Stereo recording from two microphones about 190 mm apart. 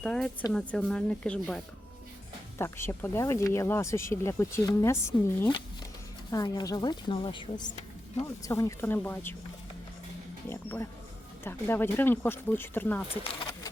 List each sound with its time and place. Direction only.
0.0 s speech: 5° left (ahead or behind)
10.5 s speech: 10° left (ahead or behind)